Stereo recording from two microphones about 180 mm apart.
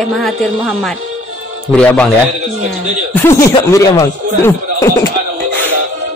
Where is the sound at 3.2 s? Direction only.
15° left (ahead or behind).